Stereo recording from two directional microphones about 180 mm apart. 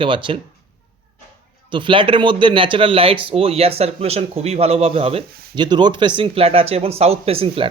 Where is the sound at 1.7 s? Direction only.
30° right (ahead or behind).